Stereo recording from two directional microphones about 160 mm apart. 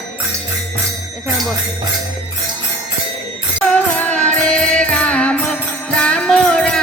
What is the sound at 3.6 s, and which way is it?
Music, 10° left (ahead or behind).